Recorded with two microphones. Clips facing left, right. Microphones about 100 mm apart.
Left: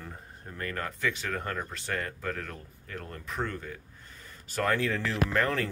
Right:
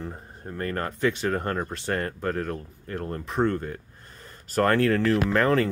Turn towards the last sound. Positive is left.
turn(degrees=-75)  # may be behind; listen again after turning